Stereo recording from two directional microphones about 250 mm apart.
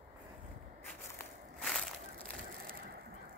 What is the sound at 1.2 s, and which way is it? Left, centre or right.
Crushing, centre.